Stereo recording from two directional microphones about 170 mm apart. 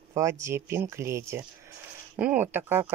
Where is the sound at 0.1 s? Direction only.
15° right (ahead or behind).